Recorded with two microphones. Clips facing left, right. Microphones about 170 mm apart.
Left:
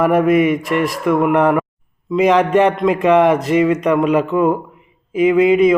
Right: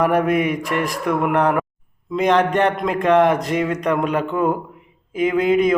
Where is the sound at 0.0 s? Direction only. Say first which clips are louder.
Left 4 dB; 5° left (ahead or behind).